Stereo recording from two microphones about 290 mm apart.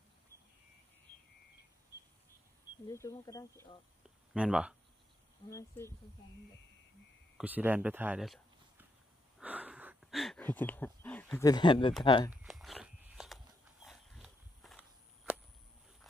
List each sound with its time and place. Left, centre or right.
2.9 s speech: centre
4.3 s speech: centre
5.5 s speech: centre
7.3 s speech: centre
9.4 s a sound: centre
12.0 s speech: centre
12.3 s a sound: centre